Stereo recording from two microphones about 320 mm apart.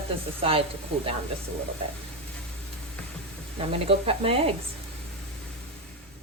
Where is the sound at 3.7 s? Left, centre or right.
Centre.